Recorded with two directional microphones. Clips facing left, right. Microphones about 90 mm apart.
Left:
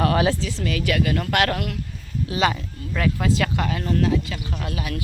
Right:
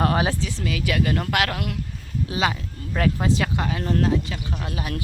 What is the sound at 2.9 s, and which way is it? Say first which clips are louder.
Speech: even; 35° right (ahead or behind).